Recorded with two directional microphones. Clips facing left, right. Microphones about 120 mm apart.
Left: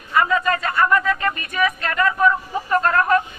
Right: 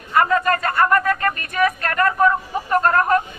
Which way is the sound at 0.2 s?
50° right (ahead or behind).